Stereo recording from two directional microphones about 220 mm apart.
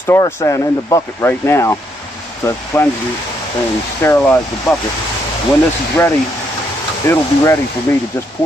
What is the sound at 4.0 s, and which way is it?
Speech, 10° left (ahead or behind).